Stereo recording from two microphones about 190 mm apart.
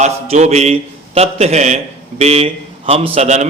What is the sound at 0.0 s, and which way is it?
A man's voice, 35° right (ahead or behind).